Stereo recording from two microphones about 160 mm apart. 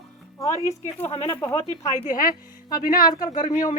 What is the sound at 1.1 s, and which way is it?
Speech, 35° left (ahead or behind).